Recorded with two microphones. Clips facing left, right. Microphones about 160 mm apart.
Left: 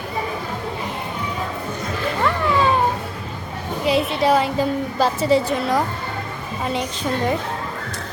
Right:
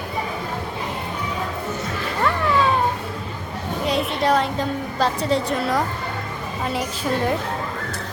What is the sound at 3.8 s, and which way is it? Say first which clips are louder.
A woman's voice: left 3 dB; 5° left (ahead or behind).